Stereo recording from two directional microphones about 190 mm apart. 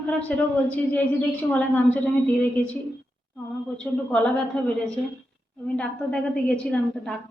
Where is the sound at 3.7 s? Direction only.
5° left (ahead or behind).